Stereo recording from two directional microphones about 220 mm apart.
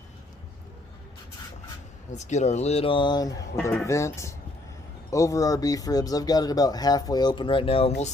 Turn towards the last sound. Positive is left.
turn(degrees=25)  # may be behind; listen again after turning